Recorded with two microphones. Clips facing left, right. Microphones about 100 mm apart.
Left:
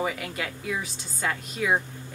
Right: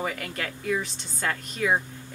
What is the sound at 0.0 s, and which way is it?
Speech, 5° left (ahead or behind).